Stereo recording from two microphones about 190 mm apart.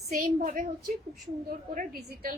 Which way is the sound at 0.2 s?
40° right (ahead or behind).